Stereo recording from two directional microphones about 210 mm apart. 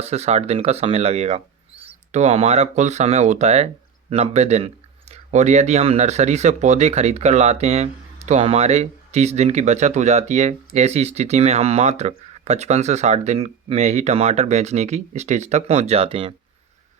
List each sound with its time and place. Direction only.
0.0 s speech: 30° right (ahead or behind)